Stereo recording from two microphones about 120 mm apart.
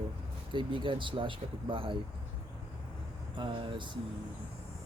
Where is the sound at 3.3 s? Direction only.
45° right (ahead or behind).